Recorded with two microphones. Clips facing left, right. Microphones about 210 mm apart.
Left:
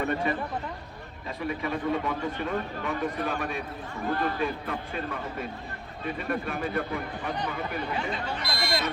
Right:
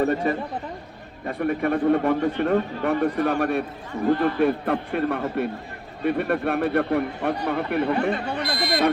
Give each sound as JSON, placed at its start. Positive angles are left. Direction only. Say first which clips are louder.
{"t": 0.0, "sound": "speech", "louder": "right 6 dB", "side_deg": -40}
{"t": 1.3, "sound": "speech", "louder": "right 8 dB", "side_deg": -60}
{"t": 8.4, "sound": "speech", "louder": "right 5 dB", "side_deg": -15}